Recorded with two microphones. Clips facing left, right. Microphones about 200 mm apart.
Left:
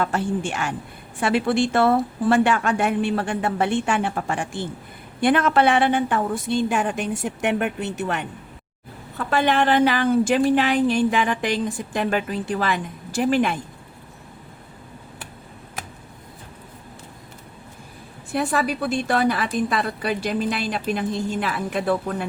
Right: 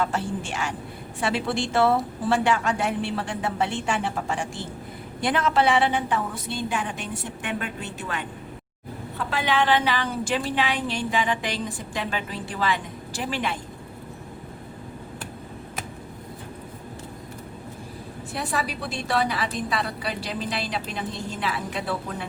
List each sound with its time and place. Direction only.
0.0 s a woman's voice: 55° left (ahead or behind)
9.3 s a woman's voice: 50° left (ahead or behind)
18.3 s a woman's voice: 55° left (ahead or behind)